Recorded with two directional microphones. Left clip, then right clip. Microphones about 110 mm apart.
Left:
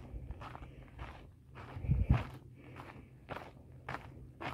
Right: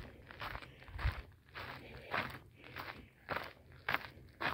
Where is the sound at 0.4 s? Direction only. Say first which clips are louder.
Right 5 dB; 25° right (ahead or behind).